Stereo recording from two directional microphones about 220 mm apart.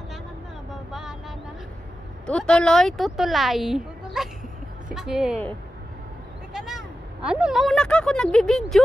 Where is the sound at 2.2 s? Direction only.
5° left (ahead or behind).